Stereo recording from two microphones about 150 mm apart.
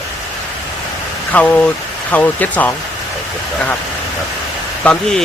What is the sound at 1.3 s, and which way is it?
Speech, 10° left (ahead or behind).